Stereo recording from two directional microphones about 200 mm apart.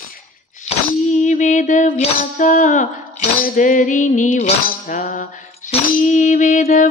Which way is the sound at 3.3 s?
45° left (ahead or behind).